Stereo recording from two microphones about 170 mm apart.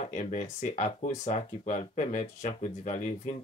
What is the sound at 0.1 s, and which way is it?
Speech, 45° left (ahead or behind).